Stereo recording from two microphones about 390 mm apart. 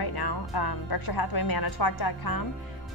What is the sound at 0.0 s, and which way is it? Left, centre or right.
A woman's voice, left.